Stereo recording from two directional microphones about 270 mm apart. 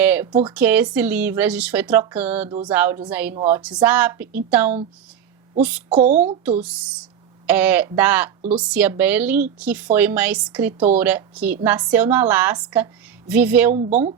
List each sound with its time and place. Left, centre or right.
0.0 s a sound: centre
0.3 s a woman's voice: centre
0.5 s a woman's voice: centre
6.0 s a woman's voice: right
6.6 s a woman's voice: centre
13.7 s a woman's voice: right